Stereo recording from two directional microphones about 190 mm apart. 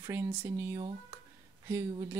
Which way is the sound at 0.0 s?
15° right (ahead or behind).